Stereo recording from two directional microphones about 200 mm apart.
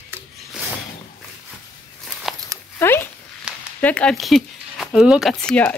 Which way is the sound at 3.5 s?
5° right (ahead or behind).